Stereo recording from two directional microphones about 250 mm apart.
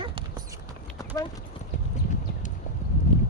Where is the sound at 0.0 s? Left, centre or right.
Right.